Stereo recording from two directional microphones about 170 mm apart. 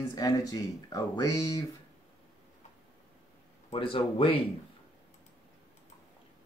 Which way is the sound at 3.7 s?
30° left (ahead or behind).